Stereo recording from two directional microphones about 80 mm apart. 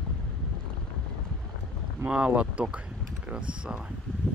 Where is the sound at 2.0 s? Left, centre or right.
Centre.